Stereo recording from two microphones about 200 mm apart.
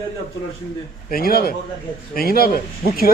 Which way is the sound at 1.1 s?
50° left (ahead or behind).